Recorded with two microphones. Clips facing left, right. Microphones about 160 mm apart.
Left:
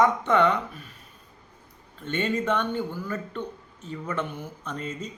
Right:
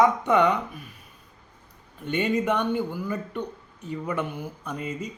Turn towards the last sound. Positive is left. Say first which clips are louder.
# right 2 dB
turn(degrees=-10)  # may be behind; listen again after turning